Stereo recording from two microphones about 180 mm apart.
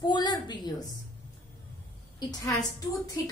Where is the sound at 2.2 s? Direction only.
20° left (ahead or behind).